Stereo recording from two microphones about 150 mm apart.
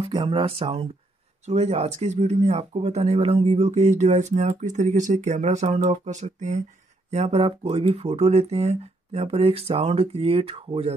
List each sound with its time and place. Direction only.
0.0 s speech: 35° right (ahead or behind)